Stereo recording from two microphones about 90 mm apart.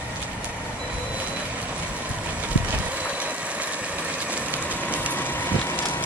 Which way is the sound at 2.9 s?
15° right (ahead or behind).